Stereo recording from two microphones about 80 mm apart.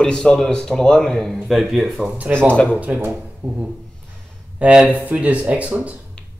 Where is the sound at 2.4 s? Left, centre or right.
Centre.